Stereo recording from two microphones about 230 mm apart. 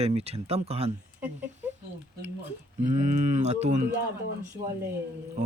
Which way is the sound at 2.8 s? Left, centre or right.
Right.